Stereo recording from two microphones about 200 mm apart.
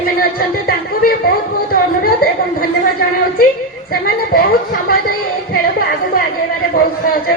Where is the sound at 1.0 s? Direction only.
50° left (ahead or behind).